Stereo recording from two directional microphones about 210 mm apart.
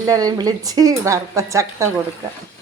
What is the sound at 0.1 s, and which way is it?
A woman's voice, 15° right (ahead or behind).